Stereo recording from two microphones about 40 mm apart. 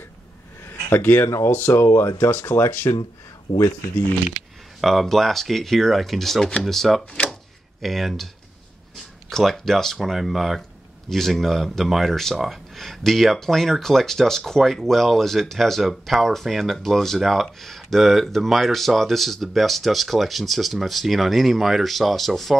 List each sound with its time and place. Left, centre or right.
0.9 s speech: left
1.7 s speech: left
4.3 s speech: centre
9.4 s speech: centre
11.1 s speech: centre
12.1 s speech: centre